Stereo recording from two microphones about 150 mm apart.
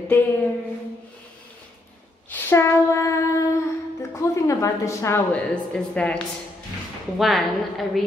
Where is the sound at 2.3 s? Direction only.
15° left (ahead or behind).